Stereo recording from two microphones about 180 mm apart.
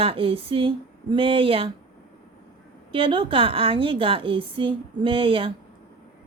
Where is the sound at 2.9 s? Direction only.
30° right (ahead or behind).